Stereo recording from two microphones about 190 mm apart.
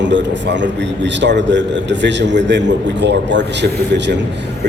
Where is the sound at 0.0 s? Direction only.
65° right (ahead or behind).